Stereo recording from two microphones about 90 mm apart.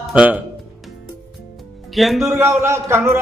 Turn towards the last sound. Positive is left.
turn(degrees=-30)  # may be behind; listen again after turning